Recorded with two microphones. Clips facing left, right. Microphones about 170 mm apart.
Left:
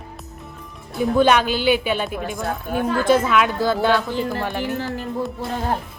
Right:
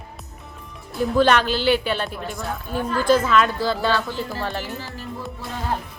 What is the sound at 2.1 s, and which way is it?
Speech, 50° left (ahead or behind).